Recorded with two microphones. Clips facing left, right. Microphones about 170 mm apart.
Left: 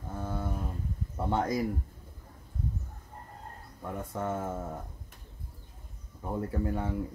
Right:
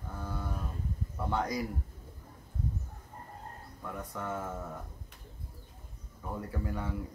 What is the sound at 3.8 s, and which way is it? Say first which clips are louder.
Speech: left 5 dB; 25° left (ahead or behind).